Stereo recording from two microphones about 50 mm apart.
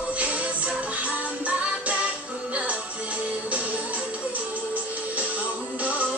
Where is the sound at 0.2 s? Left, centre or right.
Right.